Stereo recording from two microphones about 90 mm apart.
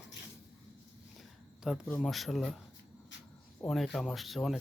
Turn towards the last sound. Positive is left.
turn(degrees=0)  # may be behind; listen again after turning